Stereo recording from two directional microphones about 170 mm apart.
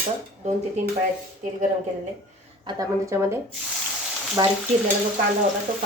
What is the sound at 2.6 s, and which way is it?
A woman's voice, 20° right (ahead or behind).